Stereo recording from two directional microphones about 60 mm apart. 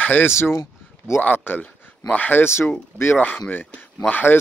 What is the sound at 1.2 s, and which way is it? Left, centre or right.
Speech, left.